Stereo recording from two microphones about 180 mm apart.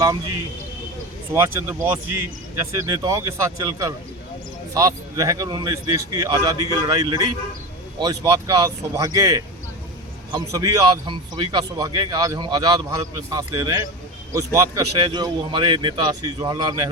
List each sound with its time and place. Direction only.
1.3 s speech: 15° right (ahead or behind)